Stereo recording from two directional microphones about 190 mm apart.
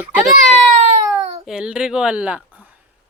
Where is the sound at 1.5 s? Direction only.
5° right (ahead or behind).